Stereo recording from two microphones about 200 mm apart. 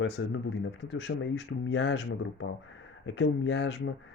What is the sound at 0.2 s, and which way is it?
Speech, 70° left (ahead or behind).